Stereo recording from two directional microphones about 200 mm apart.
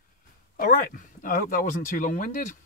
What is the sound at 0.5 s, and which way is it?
Speech, 45° left (ahead or behind).